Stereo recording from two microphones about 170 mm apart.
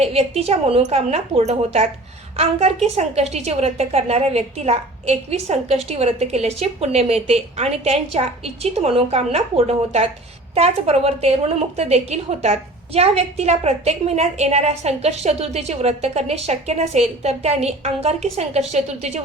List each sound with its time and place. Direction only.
0.0 s a woman's voice: 40° right (ahead or behind)